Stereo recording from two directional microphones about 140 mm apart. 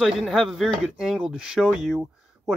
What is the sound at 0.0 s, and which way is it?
Speech, centre (ahead or behind).